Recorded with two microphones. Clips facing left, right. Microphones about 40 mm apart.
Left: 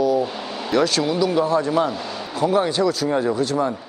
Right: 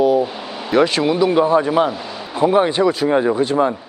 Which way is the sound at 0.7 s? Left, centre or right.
Right.